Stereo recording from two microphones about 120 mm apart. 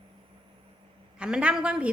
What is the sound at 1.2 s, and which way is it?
Speech, 10° right (ahead or behind).